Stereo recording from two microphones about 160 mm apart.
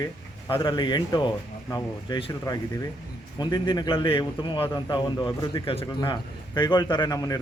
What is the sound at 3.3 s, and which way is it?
A man's voice, 30° left (ahead or behind).